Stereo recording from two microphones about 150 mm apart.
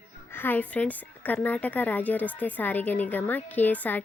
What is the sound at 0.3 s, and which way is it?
A woman's voice, 10° left (ahead or behind).